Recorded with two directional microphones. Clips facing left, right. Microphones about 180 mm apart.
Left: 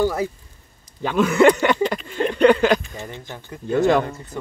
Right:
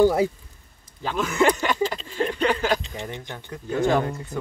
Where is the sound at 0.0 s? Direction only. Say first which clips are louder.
Right 3 dB; 15° right (ahead or behind).